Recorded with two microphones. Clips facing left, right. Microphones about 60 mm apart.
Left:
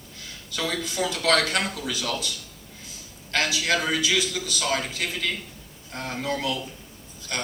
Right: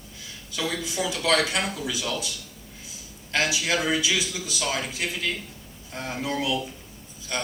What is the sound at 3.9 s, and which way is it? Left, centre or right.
Speech, left.